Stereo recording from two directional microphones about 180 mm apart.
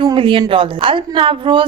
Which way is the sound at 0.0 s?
30° right (ahead or behind).